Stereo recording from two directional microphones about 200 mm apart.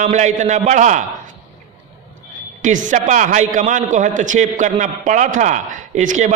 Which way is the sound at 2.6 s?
40° right (ahead or behind).